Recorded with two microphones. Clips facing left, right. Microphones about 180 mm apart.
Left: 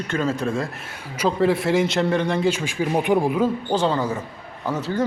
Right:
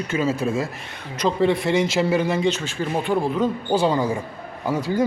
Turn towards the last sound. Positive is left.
turn(degrees=-10)  # may be behind; listen again after turning